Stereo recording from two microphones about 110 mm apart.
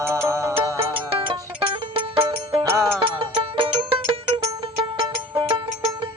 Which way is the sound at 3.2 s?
50° right (ahead or behind).